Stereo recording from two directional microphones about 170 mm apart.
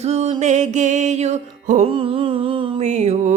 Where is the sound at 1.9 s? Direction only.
30° right (ahead or behind).